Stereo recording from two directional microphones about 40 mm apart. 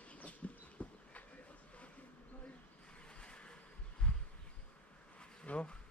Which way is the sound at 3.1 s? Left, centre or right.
Left.